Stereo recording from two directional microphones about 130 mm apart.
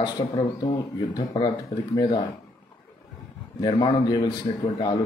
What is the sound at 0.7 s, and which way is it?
A man's voice, 35° left (ahead or behind).